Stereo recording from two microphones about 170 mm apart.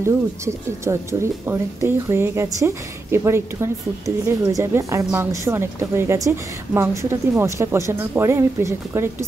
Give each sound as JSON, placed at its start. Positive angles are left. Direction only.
{"t": 0.0, "sound": "speech", "side_deg": -15}